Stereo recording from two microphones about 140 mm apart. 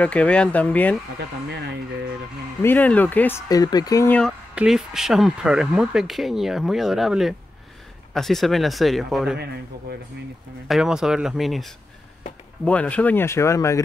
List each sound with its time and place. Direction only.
0.0 s speech: 10° left (ahead or behind)
2.6 s speech: 10° left (ahead or behind)
3.4 s speech: 25° left (ahead or behind)
4.6 s speech: 5° right (ahead or behind)
10.7 s speech: 5° right (ahead or behind)
12.6 s speech: 10° left (ahead or behind)